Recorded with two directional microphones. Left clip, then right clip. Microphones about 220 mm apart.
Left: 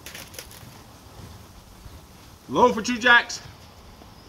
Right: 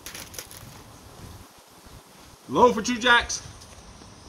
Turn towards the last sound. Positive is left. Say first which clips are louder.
# left 2 dB
turn(degrees=-5)  # may be behind; listen again after turning